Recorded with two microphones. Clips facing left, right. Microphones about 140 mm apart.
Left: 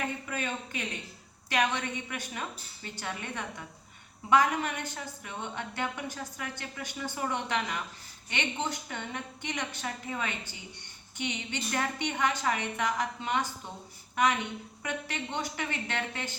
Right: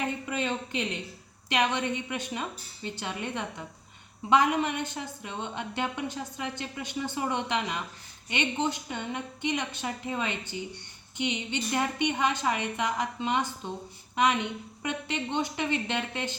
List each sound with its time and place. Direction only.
0.3 s a woman's voice: 20° right (ahead or behind)